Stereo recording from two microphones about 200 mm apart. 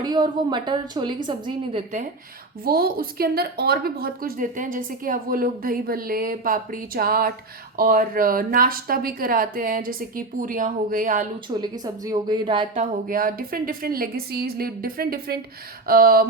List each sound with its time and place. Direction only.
0.0 s a woman's voice: 20° right (ahead or behind)
2.6 s a woman's voice: 50° right (ahead or behind)
11.4 s a woman's voice: 20° right (ahead or behind)
12.8 s a woman's voice: 45° right (ahead or behind)